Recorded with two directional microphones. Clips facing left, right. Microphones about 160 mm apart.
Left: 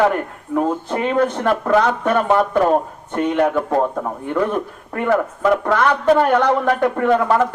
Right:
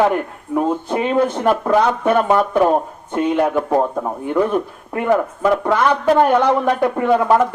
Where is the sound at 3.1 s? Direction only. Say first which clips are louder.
Right 1 dB; 10° right (ahead or behind).